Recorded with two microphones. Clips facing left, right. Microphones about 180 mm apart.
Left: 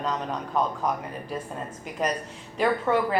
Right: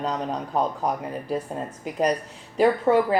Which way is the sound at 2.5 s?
35° right (ahead or behind).